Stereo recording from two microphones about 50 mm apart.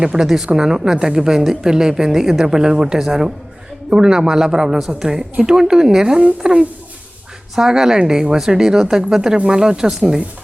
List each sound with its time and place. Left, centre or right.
0.0 s a woman's voice: centre